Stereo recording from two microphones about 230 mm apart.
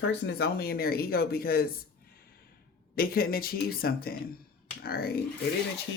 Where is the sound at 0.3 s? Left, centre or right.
Left.